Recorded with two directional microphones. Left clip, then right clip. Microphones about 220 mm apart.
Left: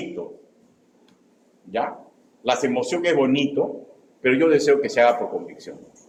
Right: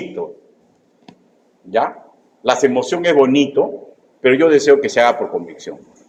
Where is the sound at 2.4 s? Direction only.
25° right (ahead or behind).